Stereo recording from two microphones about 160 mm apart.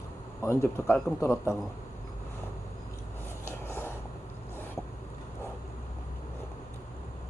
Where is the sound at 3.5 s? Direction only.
15° left (ahead or behind).